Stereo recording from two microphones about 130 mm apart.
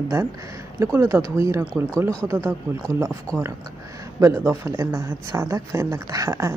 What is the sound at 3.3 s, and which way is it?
Speech, 5° left (ahead or behind).